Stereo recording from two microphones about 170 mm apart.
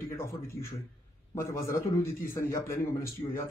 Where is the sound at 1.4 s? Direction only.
15° left (ahead or behind).